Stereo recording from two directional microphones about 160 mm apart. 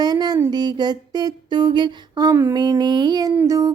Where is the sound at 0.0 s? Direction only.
25° right (ahead or behind).